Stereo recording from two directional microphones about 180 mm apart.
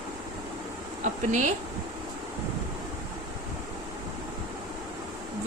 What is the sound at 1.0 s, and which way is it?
Speech, 40° right (ahead or behind).